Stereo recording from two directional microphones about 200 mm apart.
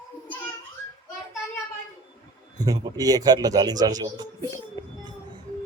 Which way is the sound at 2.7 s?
20° right (ahead or behind).